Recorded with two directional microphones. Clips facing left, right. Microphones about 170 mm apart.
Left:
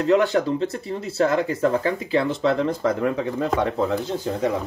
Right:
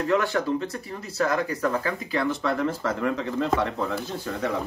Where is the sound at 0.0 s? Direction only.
20° left (ahead or behind).